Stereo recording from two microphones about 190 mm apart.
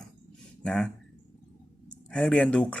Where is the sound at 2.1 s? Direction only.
5° left (ahead or behind).